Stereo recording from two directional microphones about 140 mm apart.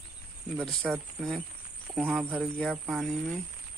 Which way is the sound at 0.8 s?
Centre (ahead or behind).